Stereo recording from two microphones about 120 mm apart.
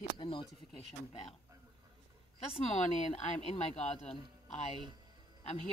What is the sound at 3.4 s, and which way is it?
Speech, 65° left (ahead or behind).